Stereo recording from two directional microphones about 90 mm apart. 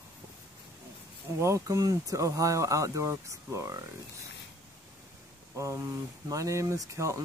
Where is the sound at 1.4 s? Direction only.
35° right (ahead or behind).